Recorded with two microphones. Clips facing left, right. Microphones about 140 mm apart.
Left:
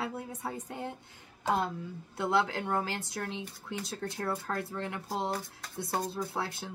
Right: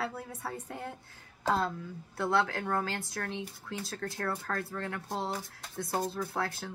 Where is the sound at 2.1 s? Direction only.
20° left (ahead or behind).